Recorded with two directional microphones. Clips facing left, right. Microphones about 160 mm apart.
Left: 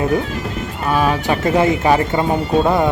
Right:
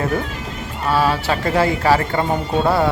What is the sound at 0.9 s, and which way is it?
Speech, 15° left (ahead or behind).